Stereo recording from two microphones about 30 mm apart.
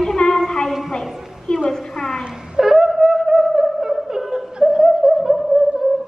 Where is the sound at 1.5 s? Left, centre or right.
Left.